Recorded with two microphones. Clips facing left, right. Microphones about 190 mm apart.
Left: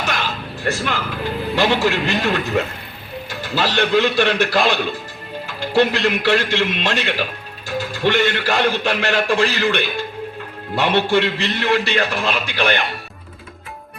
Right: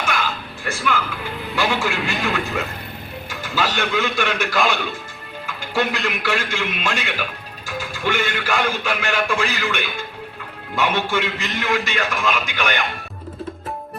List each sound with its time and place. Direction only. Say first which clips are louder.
0.0 s music: even; 35° left (ahead or behind)
1.5 s speech: left 4 dB; 35° left (ahead or behind)
3.2 s music: left 2 dB; 35° left (ahead or behind)
3.8 s speech: left 6 dB; 35° left (ahead or behind)